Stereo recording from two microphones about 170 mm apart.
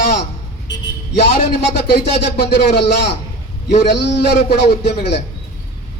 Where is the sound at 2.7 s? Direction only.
80° left.